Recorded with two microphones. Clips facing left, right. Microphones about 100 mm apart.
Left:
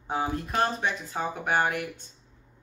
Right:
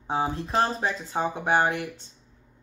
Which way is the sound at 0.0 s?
25° right (ahead or behind).